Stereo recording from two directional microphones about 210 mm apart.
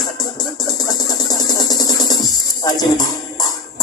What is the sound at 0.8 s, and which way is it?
Music, 20° left (ahead or behind).